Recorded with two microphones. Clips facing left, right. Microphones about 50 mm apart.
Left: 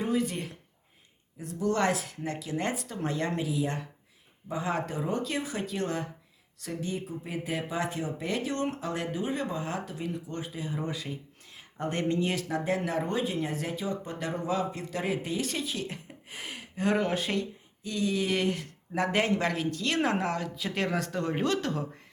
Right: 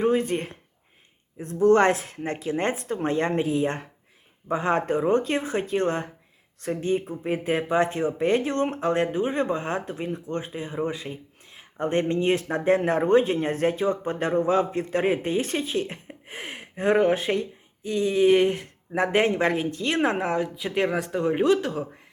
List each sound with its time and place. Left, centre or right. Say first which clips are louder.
0.0 s speech: right 7 dB; right; by 21.8 s centre